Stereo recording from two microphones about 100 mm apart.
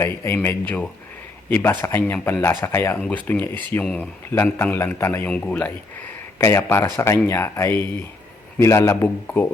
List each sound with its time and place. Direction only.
0.0 s speech: 25° left (ahead or behind)
5.3 s speech: 15° left (ahead or behind)
6.4 s speech: 25° left (ahead or behind)
9.2 s speech: 15° left (ahead or behind)